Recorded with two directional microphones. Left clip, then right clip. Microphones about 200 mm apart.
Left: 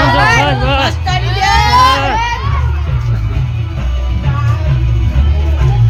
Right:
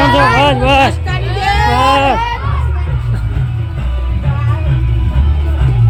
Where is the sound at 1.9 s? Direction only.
25° right (ahead or behind).